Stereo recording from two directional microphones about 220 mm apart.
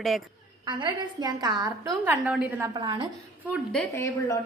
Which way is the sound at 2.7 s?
20° right (ahead or behind).